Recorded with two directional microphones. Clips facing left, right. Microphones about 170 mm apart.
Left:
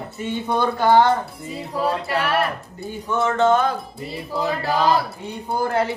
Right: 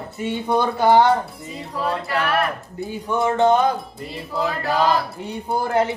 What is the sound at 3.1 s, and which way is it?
Speech, 20° right (ahead or behind).